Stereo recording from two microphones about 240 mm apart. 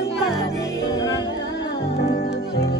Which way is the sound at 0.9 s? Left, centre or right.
Centre.